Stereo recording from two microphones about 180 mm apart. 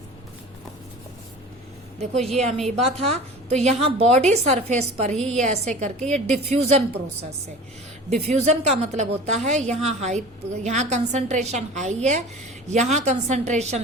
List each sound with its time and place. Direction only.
2.1 s a woman's voice: centre (ahead or behind)
3.0 s a woman's voice: 35° right (ahead or behind)
8.1 s a woman's voice: 35° right (ahead or behind)